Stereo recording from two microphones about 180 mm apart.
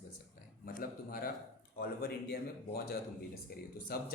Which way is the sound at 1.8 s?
60° left (ahead or behind).